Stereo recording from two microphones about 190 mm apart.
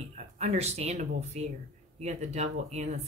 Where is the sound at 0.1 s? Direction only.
35° right (ahead or behind).